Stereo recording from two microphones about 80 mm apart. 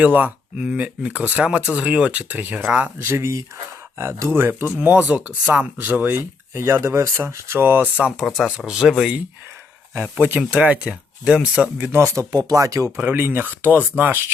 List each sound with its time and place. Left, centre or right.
0.0 s speech: centre
3.0 s speech: right
6.5 s speech: right
7.9 s speech: centre
8.2 s speech: centre
10.0 s speech: right
10.5 s speech: centre
11.8 s speech: right
12.3 s speech: right
13.0 s speech: right